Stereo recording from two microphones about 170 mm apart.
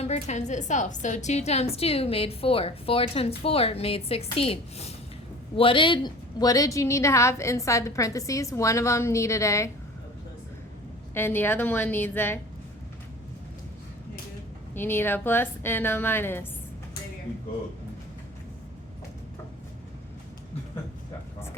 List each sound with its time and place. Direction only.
0.0 s a woman's voice: 40° left (ahead or behind); by 9.6 s 20° left (ahead or behind)
11.1 s a woman's voice: 10° left (ahead or behind)
14.8 s a woman's voice: 10° left (ahead or behind)